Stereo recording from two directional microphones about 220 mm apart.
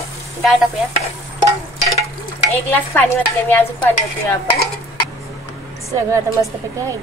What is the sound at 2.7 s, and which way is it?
Stir, 10° left (ahead or behind).